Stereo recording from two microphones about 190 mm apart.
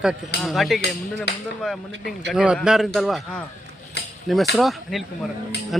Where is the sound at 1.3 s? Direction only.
60° left (ahead or behind).